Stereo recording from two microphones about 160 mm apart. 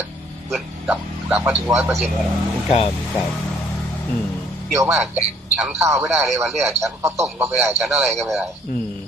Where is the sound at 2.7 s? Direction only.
35° left (ahead or behind).